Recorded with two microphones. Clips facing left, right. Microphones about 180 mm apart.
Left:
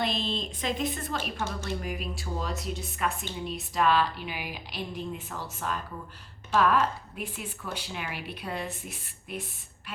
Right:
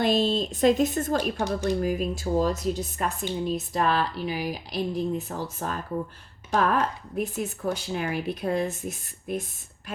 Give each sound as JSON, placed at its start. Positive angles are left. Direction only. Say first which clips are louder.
{"t": 0.0, "sound": "speech", "louder": "right 8 dB", "side_deg": -45}